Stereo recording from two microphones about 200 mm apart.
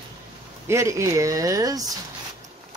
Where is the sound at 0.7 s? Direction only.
15° right (ahead or behind).